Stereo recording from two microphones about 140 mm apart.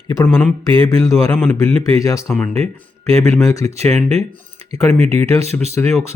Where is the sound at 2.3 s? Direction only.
5° left (ahead or behind).